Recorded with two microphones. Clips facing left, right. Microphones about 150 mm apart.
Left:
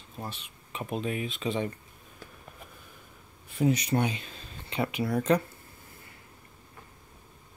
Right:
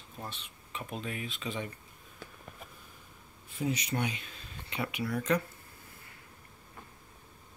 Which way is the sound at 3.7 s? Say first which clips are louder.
Left 6 dB; 35° left (ahead or behind).